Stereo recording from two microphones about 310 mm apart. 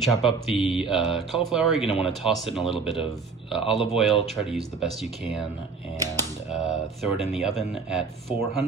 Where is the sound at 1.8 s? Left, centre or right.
Centre.